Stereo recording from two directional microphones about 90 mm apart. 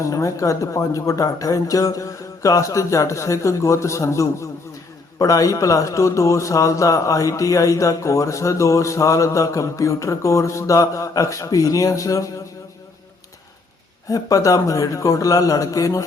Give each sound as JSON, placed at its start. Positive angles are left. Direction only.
{"t": 0.0, "sound": "a man's voice", "side_deg": 35}
{"t": 14.1, "sound": "a man's voice", "side_deg": 40}